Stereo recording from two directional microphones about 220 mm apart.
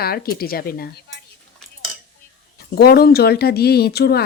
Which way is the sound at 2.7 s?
45° left (ahead or behind).